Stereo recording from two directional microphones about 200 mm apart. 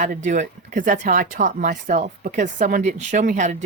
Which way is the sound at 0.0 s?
40° right (ahead or behind).